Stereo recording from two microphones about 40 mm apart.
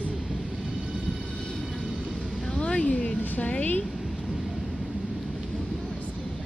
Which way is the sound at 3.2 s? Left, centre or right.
Left.